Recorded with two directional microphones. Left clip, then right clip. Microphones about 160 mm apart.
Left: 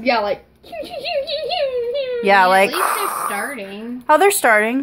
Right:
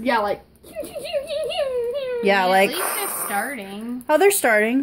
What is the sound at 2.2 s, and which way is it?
Speech, 15° right (ahead or behind).